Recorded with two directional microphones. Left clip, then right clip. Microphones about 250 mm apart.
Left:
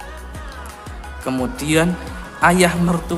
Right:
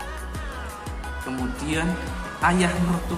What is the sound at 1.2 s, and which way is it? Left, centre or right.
A man's voice, left.